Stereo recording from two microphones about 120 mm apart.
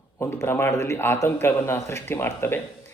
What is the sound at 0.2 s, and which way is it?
A man's voice, 20° left (ahead or behind).